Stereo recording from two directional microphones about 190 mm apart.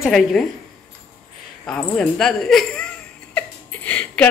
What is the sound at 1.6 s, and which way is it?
Speech, 5° left (ahead or behind).